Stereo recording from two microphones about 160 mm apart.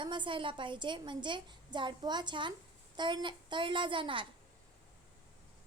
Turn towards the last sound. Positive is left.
turn(degrees=-30)  # may be behind; listen again after turning